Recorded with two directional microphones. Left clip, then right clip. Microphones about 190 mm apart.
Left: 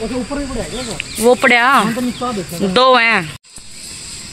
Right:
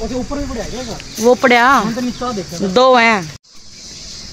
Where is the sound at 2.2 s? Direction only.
20° left (ahead or behind).